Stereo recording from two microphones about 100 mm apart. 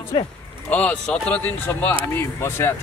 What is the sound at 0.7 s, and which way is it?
A man's voice, 15° left (ahead or behind).